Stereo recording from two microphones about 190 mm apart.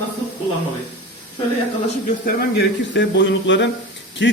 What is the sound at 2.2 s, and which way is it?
Speech, 65° left (ahead or behind).